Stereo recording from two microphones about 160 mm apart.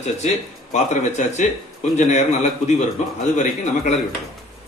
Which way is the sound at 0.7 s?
45° left (ahead or behind).